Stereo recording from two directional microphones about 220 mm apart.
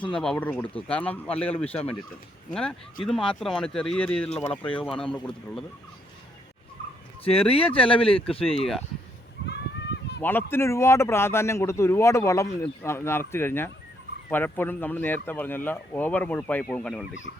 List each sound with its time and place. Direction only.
0.1 s speech: 5° left (ahead or behind)
7.3 s speech: 25° left (ahead or behind)
10.2 s speech: 10° left (ahead or behind)